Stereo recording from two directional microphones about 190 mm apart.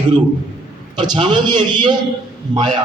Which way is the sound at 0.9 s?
25° right (ahead or behind).